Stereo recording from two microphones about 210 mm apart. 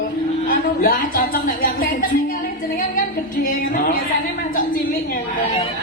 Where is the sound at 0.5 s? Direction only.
45° left (ahead or behind).